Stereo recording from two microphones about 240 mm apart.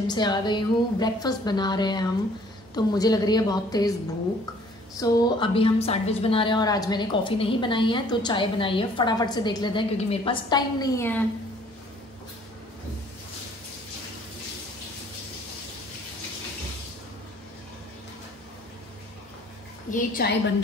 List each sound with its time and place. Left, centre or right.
0.1 s a woman's voice: centre
4.9 s a woman's voice: centre
19.9 s a woman's voice: left